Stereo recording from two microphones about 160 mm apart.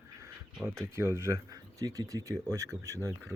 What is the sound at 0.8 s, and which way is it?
Speech, 15° right (ahead or behind).